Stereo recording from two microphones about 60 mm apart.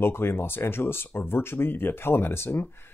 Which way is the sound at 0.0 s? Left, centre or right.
Left.